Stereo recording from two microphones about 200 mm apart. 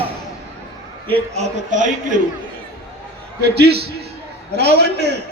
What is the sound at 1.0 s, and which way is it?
A man's voice, 30° right (ahead or behind).